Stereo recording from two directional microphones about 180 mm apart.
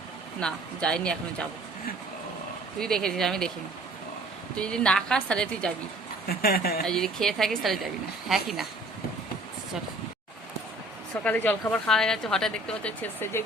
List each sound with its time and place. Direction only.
0.3 s a woman's voice: 5° left (ahead or behind)
2.7 s a woman's voice: 5° left (ahead or behind)
4.5 s a woman's voice: 5° left (ahead or behind)
6.2 s speech: 60° left (ahead or behind)
6.8 s a woman's voice: 5° left (ahead or behind)
11.1 s a woman's voice: 10° left (ahead or behind)